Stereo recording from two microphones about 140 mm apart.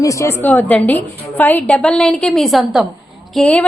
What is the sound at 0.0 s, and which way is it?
A woman's voice, 20° left (ahead or behind).